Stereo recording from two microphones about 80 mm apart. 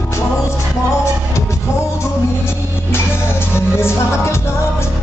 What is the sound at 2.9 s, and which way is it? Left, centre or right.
Music, left.